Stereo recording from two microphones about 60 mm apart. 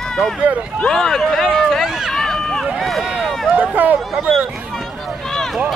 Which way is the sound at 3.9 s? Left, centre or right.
Centre.